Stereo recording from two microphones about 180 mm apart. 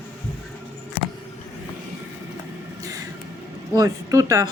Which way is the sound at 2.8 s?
20° right (ahead or behind).